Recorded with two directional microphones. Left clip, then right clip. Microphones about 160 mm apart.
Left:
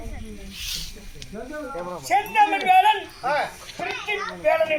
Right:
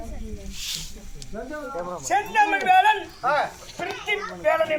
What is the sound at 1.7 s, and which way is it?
Speech, 50° left (ahead or behind).